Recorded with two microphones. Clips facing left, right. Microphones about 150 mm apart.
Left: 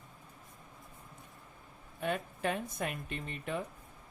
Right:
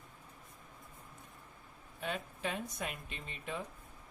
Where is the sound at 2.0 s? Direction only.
55° left (ahead or behind).